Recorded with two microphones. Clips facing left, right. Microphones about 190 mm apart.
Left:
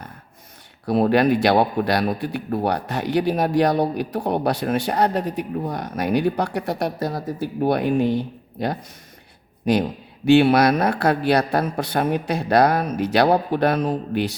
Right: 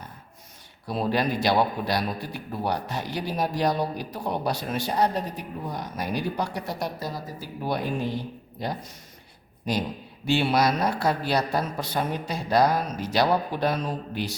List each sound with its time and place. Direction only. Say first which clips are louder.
0.9 s a man's voice: left 9 dB; 60° left (ahead or behind)